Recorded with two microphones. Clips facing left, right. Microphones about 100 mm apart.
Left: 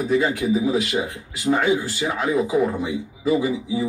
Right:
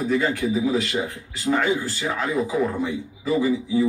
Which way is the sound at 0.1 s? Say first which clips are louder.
Left 3 dB; 15° left (ahead or behind).